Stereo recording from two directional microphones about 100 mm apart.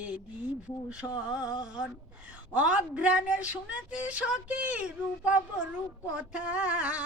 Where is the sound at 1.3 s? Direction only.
10° right (ahead or behind).